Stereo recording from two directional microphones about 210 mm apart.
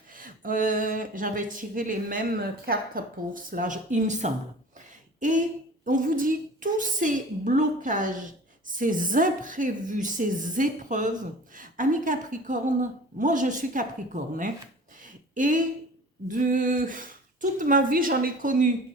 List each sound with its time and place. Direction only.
0.1 s a woman's voice: 40° right (ahead or behind)
15.0 s a sound: 40° right (ahead or behind)
16.3 s a woman's voice: 40° right (ahead or behind)